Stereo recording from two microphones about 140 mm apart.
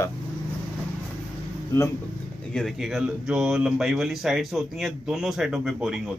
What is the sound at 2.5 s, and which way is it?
Speech, centre (ahead or behind).